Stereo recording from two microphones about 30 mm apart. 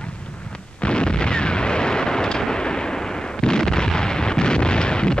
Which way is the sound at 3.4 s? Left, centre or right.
Left.